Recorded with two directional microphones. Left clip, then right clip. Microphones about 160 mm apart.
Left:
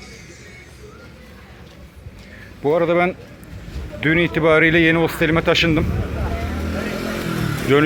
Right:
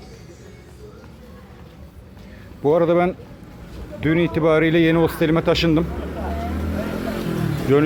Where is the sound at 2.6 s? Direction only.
25° right (ahead or behind).